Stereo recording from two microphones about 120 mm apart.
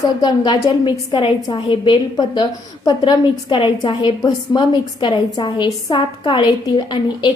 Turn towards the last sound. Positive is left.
turn(degrees=35)  # may be behind; listen again after turning